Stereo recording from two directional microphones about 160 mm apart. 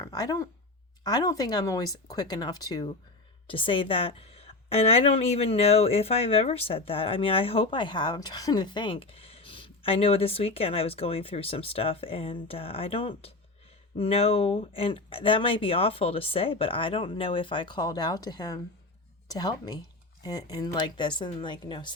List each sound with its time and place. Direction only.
0.0 s a woman's voice: 25° left (ahead or behind)